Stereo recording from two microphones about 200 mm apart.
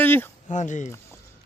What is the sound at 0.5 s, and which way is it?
Speech, 40° left (ahead or behind).